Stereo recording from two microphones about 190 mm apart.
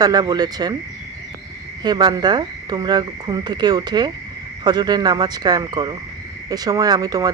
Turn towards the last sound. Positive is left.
turn(degrees=-20)  # may be behind; listen again after turning